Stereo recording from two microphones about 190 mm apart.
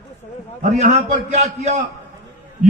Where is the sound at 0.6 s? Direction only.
40° right (ahead or behind).